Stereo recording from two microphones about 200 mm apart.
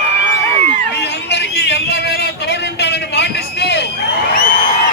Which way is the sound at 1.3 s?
55° left (ahead or behind).